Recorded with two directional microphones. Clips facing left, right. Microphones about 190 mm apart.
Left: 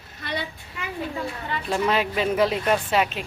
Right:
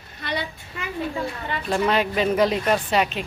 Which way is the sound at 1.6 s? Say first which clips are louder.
Right 2 dB; 5° left (ahead or behind).